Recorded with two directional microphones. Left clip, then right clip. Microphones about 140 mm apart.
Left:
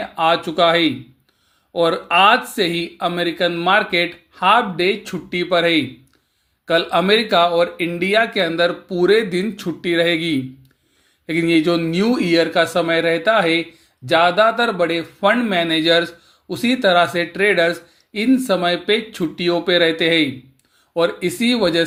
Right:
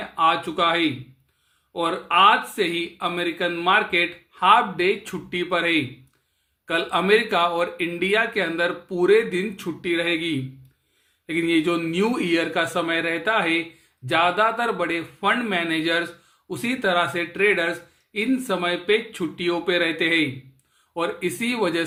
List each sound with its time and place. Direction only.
0.2 s speech: 35° left (ahead or behind)